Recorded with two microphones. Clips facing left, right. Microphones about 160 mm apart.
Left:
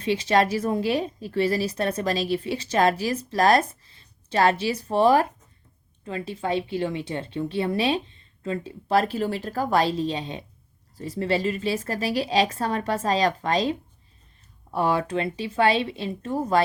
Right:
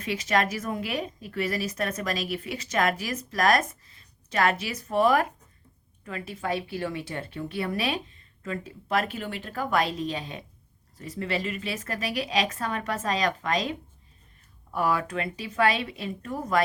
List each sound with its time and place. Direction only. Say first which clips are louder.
0.0 s a woman's voice: left 5 dB; 30° left (ahead or behind)